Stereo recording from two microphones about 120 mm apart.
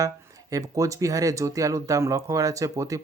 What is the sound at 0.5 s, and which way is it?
Speech, 25° right (ahead or behind).